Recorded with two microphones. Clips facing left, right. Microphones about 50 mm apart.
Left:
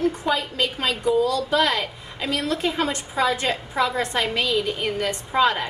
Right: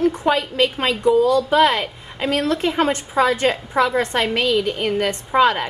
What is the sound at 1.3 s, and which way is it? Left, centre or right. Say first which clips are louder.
Speech: right 6 dB; right.